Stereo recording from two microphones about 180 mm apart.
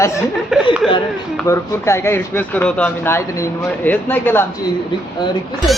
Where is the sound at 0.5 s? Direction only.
Centre (ahead or behind).